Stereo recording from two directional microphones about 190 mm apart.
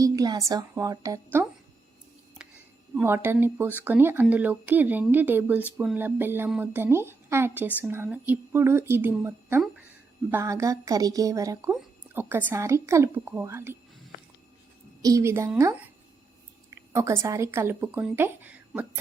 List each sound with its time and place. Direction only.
0.0 s speech: 20° right (ahead or behind)
2.9 s speech: 10° right (ahead or behind)
15.0 s speech: 15° right (ahead or behind)